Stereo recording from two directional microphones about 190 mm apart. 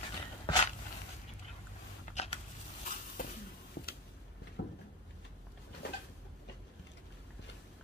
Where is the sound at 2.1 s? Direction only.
35° left (ahead or behind).